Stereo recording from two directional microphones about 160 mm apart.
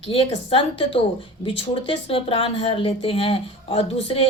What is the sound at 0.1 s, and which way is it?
Speech, 35° left (ahead or behind).